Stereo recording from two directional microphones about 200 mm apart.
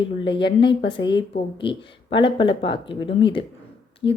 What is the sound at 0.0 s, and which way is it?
Speech, 25° left (ahead or behind).